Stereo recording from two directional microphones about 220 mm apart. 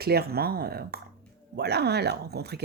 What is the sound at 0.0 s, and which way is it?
Speech, 45° right (ahead or behind).